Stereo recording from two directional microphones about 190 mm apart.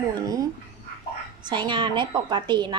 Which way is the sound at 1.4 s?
25° right (ahead or behind).